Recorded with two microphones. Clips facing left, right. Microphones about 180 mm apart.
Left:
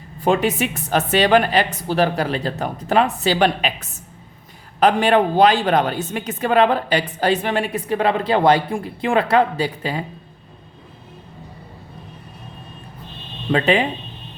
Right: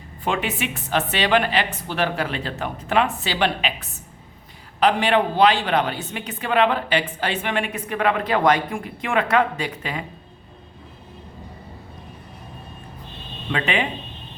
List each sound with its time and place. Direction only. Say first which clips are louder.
0.2 s speech: left 7 dB; 40° left (ahead or behind)
13.5 s speech: left 7 dB; 35° left (ahead or behind)